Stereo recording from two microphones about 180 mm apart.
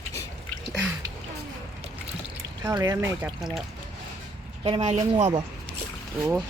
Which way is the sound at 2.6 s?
20° right (ahead or behind).